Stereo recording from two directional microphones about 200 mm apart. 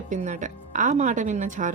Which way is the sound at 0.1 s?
40° right (ahead or behind).